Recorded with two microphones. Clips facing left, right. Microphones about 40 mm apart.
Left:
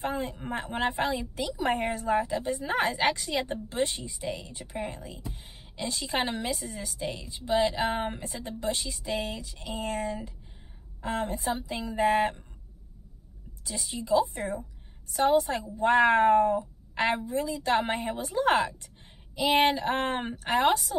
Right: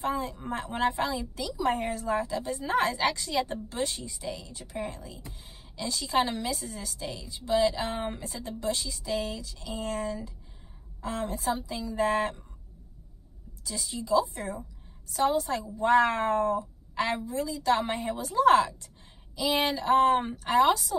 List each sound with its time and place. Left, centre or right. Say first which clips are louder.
0.0 s a woman's voice: right 1 dB; left
2.0 s a woman's voice: left 2 dB; left
13.7 s a woman's voice: left 1 dB; left